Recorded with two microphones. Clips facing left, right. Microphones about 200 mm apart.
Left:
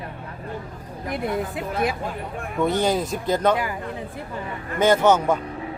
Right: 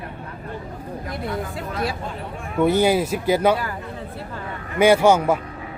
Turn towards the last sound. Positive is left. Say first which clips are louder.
# right 2 dB
turn(degrees=-10)  # may be behind; listen again after turning